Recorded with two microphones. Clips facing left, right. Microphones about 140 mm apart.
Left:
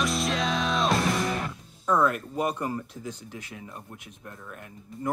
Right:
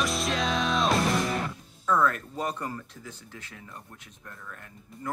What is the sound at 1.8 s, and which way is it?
Speech, 15° left (ahead or behind).